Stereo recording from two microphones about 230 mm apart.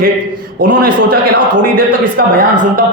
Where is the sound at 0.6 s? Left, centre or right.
Right.